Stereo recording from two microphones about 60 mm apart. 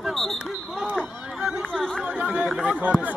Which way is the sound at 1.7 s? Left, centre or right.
Centre.